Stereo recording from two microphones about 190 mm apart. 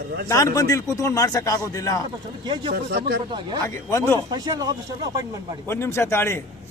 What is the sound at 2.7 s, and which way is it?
Speech, 55° right (ahead or behind).